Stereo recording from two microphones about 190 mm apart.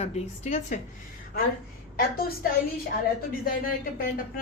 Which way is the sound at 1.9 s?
50° left (ahead or behind).